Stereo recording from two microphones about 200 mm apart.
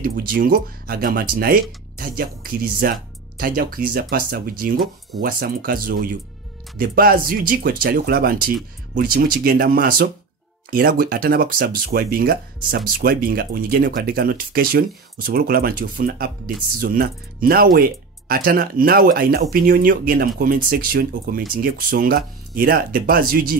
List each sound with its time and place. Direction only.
0.0 s speech: 45° right (ahead or behind)